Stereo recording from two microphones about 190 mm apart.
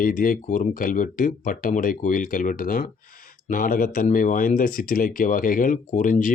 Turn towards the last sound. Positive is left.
turn(degrees=45)  # may be behind; listen again after turning